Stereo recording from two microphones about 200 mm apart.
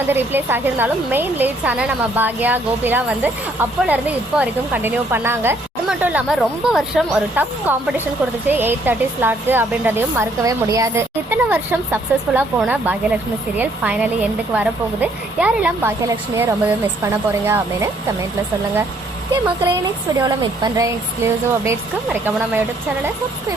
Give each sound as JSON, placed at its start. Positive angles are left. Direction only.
{"t": 0.1, "sound": "speech", "side_deg": -10}
{"t": 20.1, "sound": "speech", "side_deg": -20}